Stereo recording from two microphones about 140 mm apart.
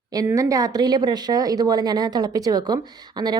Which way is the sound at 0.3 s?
25° right (ahead or behind).